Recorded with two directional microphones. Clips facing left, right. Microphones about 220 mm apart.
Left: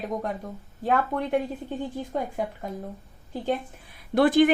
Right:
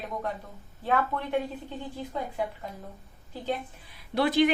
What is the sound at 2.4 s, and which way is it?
Speech, 45° left (ahead or behind).